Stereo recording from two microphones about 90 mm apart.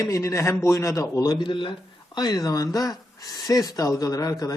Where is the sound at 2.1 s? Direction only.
45° left (ahead or behind).